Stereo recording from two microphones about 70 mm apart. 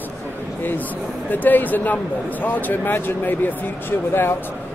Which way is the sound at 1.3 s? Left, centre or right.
Left.